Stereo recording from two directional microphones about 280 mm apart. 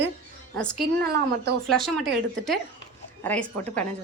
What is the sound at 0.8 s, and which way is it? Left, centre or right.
Speech, right.